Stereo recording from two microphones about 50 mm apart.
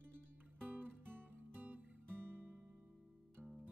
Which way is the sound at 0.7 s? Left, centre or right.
Right.